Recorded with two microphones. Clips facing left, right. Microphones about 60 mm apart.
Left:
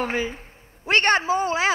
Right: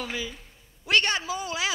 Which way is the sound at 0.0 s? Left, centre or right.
Left.